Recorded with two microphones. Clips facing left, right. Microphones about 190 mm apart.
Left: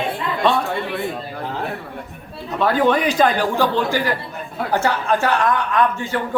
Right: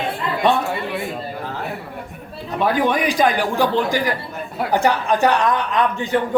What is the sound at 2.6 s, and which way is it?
A man's voice, 10° right (ahead or behind).